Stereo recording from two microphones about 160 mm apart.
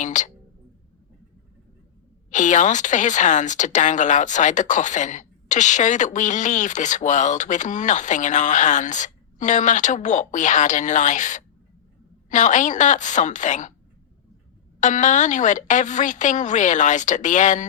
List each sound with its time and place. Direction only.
0.0 s speech: 50° left (ahead or behind)
2.3 s speech: 50° left (ahead or behind)
14.8 s speech: 50° left (ahead or behind)